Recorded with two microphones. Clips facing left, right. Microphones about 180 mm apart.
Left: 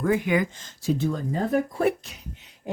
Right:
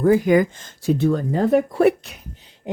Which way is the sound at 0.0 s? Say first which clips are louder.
Right 7 dB; 35° right (ahead or behind).